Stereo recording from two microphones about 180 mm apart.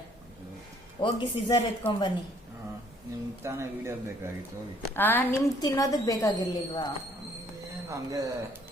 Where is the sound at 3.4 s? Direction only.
15° right (ahead or behind).